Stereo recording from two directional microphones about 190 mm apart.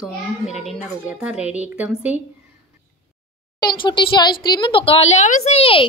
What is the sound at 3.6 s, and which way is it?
A woman's voice, 25° left (ahead or behind).